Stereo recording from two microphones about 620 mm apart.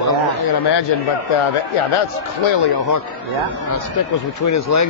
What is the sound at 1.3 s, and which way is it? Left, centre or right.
Speech, left.